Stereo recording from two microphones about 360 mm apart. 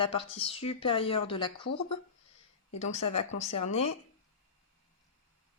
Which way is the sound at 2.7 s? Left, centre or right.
Centre.